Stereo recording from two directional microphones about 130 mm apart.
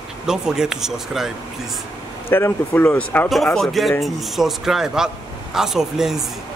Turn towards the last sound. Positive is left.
turn(degrees=-5)  # may be behind; listen again after turning